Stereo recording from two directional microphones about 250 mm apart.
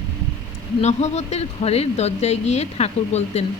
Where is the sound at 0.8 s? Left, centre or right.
Left.